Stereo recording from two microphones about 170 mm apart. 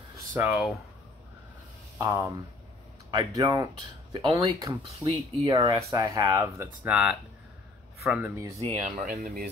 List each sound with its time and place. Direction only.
0.1 s a sound: 10° right (ahead or behind)
2.0 s speech: 15° right (ahead or behind)
5.0 s speech: 30° right (ahead or behind); by 8.3 s 10° right (ahead or behind)
8.6 s speech: 40° right (ahead or behind)
9.0 s speech: 60° right (ahead or behind)